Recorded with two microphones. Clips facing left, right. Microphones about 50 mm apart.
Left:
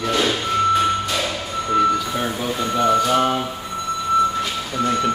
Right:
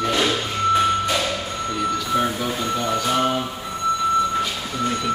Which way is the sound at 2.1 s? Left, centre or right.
Centre.